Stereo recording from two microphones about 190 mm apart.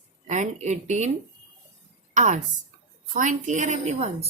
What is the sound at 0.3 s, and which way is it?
Speech, 40° right (ahead or behind).